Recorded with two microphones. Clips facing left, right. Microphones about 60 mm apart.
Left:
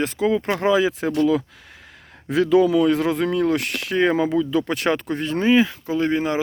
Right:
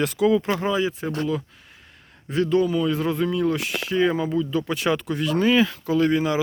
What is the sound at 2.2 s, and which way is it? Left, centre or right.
Speech, left.